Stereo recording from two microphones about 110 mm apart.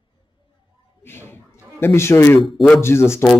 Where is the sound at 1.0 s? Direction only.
20° left (ahead or behind).